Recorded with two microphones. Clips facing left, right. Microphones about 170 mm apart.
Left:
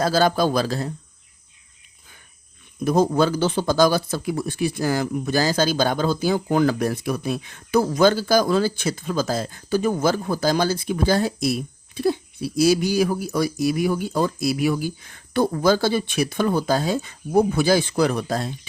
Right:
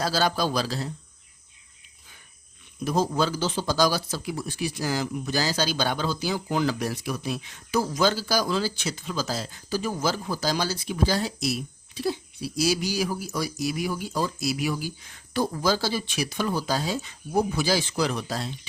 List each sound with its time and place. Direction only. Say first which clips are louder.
0.0 s speech: left 6 dB; 50° left (ahead or behind)
2.8 s speech: left 6 dB; 55° left (ahead or behind)